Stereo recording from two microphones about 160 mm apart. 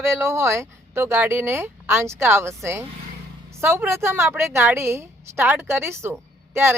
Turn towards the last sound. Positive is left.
turn(degrees=-15)  # may be behind; listen again after turning